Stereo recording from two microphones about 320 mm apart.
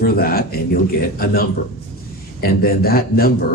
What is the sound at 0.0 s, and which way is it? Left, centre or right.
Speech, left.